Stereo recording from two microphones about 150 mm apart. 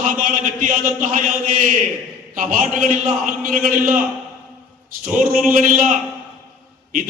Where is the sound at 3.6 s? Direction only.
70° right (ahead or behind).